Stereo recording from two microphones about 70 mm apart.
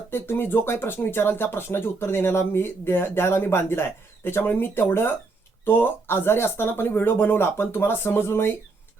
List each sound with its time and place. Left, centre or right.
0.1 s speech: left